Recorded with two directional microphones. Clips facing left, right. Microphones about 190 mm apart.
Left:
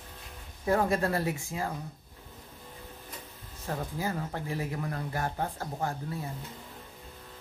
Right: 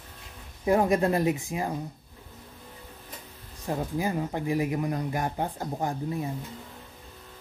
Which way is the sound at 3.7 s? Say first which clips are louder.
Right 5 dB; 15° right (ahead or behind).